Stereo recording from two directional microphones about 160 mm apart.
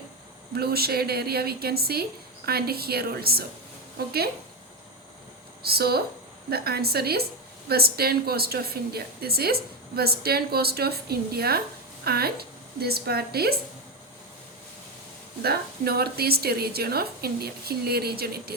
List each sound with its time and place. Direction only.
0.5 s a woman's voice: 80° right
5.6 s a woman's voice: 75° right (ahead or behind)
15.4 s a woman's voice: 75° right (ahead or behind)